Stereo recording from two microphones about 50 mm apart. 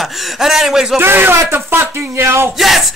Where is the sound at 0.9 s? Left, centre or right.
Right.